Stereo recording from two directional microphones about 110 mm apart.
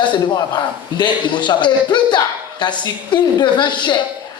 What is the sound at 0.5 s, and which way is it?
A man's voice, 40° left (ahead or behind).